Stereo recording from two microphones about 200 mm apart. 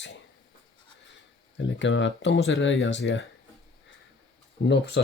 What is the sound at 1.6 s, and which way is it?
Speech, 65° left (ahead or behind).